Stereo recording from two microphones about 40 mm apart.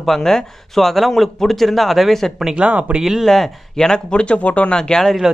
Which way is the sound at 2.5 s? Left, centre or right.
Right.